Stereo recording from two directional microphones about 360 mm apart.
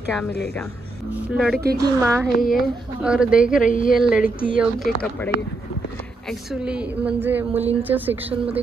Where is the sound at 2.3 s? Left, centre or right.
Left.